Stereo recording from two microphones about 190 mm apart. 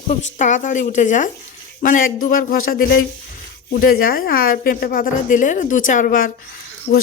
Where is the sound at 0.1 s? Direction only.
40° left (ahead or behind).